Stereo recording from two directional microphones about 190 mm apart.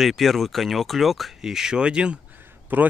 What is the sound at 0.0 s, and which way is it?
Speech, centre (ahead or behind).